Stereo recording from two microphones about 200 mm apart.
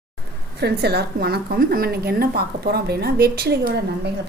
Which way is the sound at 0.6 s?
55° right (ahead or behind).